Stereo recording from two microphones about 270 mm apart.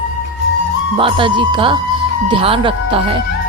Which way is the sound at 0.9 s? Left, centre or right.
Centre.